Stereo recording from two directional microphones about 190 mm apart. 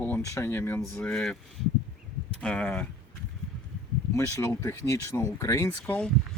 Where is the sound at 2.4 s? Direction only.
5° left (ahead or behind).